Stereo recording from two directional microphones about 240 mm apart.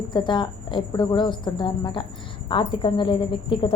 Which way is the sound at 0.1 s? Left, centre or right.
Centre.